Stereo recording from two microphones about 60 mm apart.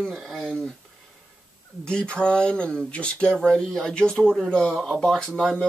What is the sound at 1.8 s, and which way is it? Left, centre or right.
Speech, centre.